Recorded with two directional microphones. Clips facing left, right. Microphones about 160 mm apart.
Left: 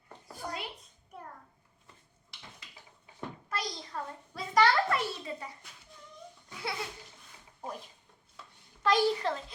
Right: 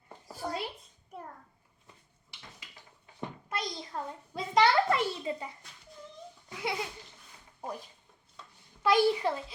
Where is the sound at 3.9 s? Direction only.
20° right (ahead or behind).